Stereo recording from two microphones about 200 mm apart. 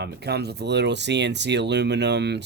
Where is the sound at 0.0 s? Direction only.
55° right (ahead or behind).